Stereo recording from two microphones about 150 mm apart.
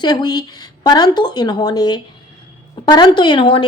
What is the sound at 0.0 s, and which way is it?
A woman's voice, 30° left (ahead or behind).